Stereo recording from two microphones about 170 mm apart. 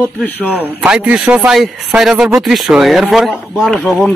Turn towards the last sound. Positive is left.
turn(degrees=0)  # may be behind; listen again after turning